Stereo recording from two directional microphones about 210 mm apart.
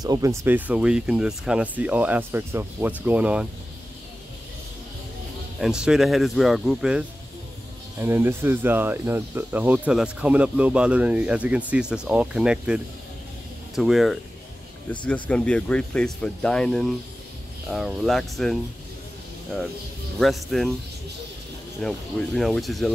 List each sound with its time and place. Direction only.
0.0 s speech: 15° right (ahead or behind)
5.6 s speech: 5° right (ahead or behind)
20.2 s speech: centre (ahead or behind)
21.8 s speech: centre (ahead or behind)